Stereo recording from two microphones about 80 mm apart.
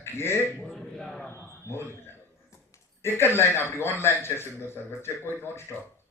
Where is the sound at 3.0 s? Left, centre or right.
Left.